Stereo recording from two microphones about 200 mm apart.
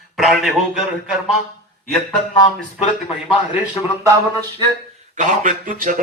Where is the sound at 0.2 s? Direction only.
Centre (ahead or behind).